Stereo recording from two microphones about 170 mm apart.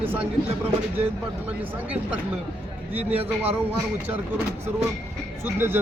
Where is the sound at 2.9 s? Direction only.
10° right (ahead or behind).